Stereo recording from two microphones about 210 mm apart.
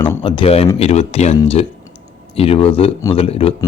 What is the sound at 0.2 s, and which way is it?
A man's voice, 25° left (ahead or behind).